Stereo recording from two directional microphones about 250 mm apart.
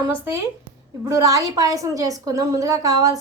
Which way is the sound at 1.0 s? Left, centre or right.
Centre.